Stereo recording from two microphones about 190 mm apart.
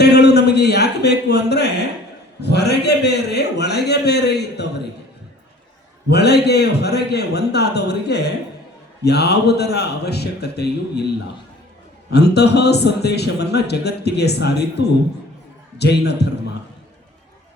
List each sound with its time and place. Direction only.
0.0 s a sound: 60° left (ahead or behind)
2.4 s a man's voice: 60° left (ahead or behind)
6.1 s a man's voice: 60° left (ahead or behind)
12.1 s a man's voice: 60° left (ahead or behind)